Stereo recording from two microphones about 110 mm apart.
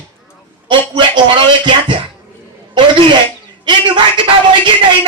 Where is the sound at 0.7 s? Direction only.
45° right (ahead or behind).